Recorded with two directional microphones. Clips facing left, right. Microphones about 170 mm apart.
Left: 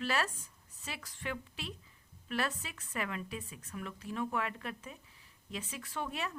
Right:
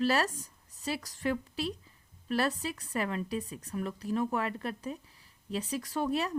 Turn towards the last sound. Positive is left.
turn(degrees=-35)  # may be behind; listen again after turning